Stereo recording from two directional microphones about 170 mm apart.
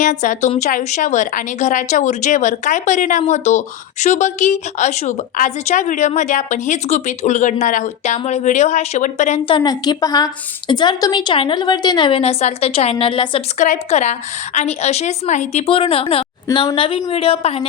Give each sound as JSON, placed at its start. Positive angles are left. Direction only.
{"t": 0.0, "sound": "a woman's voice", "side_deg": 45}
{"t": 9.5, "sound": "a woman's voice", "side_deg": 25}
{"t": 13.6, "sound": "a woman's voice", "side_deg": 45}